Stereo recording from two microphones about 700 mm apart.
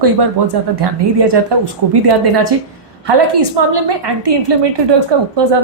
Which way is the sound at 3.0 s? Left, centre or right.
Right.